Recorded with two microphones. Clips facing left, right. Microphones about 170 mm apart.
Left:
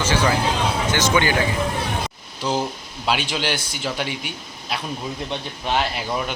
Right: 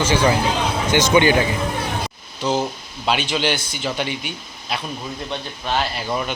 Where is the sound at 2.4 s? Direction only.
10° left (ahead or behind).